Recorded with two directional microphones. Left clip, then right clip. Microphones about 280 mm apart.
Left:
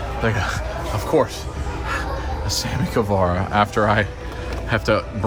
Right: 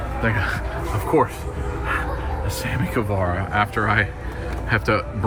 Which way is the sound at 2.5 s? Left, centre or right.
Centre.